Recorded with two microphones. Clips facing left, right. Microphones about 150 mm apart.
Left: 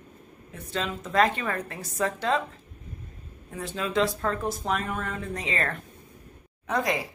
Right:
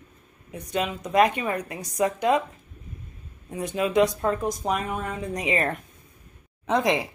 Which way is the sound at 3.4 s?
20° right (ahead or behind).